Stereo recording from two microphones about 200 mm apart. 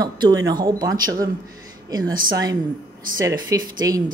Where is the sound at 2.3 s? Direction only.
20° right (ahead or behind).